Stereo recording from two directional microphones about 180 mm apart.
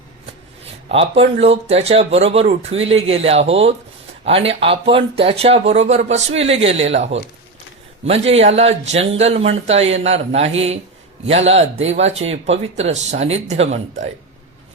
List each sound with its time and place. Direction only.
0.9 s speech: 35° right (ahead or behind)